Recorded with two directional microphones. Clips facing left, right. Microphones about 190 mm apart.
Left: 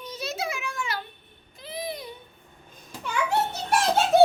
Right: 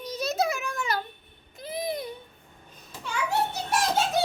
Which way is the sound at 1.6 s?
45° right (ahead or behind).